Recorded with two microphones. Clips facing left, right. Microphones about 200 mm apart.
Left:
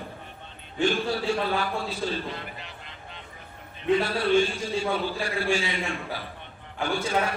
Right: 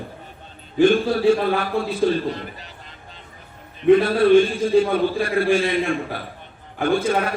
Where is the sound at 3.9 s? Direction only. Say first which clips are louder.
Right 9 dB; 55° right (ahead or behind).